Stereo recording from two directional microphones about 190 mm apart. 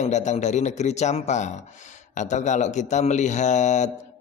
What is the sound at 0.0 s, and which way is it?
Speech, 40° left (ahead or behind).